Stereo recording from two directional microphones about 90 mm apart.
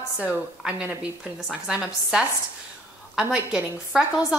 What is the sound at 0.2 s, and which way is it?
Speech, 15° right (ahead or behind).